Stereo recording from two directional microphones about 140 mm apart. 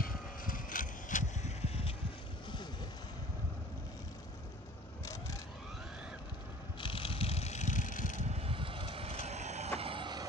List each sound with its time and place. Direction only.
0.0 s vehicle: 85° left; by 2.0 s 45° left (ahead or behind)
5.0 s vehicle: 20° left (ahead or behind)
6.8 s vehicle: 40° left (ahead or behind); by 8.3 s 65° left (ahead or behind)
8.3 s vehicle: 45° right (ahead or behind)